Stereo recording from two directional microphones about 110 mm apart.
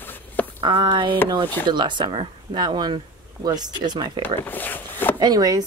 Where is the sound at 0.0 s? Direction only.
20° left (ahead or behind).